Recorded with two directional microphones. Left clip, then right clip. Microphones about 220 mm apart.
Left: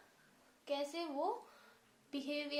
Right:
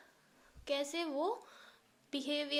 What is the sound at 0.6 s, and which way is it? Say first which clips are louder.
A woman's voice: right 3 dB; 45° right (ahead or behind).